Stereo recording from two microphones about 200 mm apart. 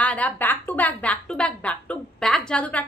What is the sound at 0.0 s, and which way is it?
A woman's voice, 5° left (ahead or behind).